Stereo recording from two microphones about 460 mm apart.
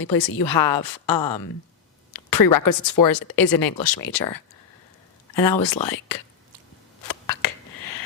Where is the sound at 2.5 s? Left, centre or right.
Left.